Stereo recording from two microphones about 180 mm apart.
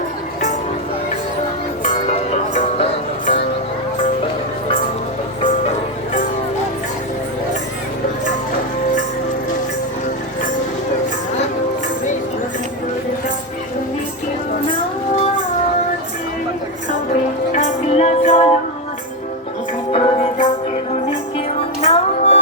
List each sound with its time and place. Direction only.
1.9 s music: 35° left (ahead or behind)
17.5 s music: 40° left (ahead or behind)
19.9 s music: 35° left (ahead or behind)